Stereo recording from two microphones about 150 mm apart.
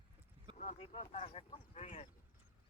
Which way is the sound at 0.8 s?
40° left (ahead or behind).